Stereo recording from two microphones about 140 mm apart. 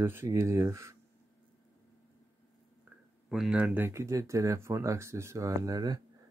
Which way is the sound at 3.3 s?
5° right (ahead or behind).